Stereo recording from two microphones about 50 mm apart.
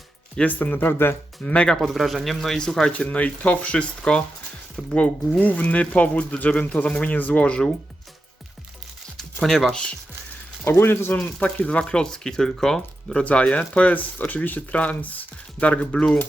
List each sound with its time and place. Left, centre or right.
0.4 s speech: left
1.4 s speech: left
1.6 s speech: centre
2.9 s speech: left
5.4 s speech: left
9.1 s a sound: centre
10.7 s speech: left
11.3 s speech: left; by 13.2 s centre
13.2 s speech: left